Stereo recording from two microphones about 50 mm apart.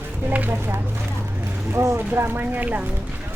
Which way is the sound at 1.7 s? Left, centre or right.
Right.